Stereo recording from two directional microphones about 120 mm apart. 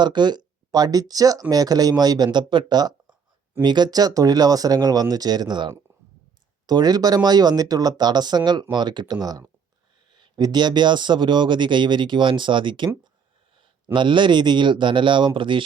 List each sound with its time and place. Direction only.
0.0 s speech: 40° right (ahead or behind)